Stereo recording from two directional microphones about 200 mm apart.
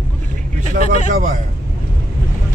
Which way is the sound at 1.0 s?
45° right (ahead or behind).